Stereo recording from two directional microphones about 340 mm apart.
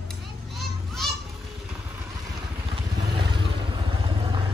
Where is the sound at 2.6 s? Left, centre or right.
Centre.